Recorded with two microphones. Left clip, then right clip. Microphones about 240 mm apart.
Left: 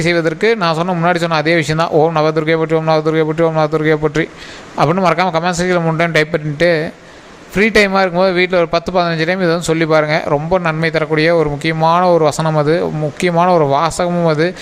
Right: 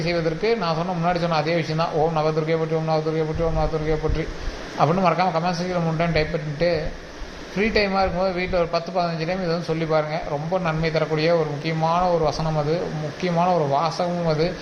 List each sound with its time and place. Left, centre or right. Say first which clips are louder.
0.0 s a man's voice: left 9 dB; left